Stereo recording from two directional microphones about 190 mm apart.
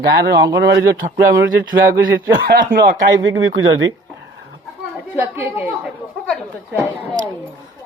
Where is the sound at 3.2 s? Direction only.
90° right.